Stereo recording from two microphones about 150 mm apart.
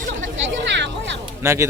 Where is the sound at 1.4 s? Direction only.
20° right (ahead or behind).